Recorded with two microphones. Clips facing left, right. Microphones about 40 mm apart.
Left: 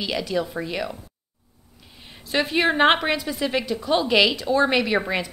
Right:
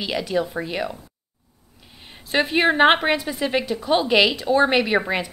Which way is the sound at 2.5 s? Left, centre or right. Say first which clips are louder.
Right 2 dB; centre.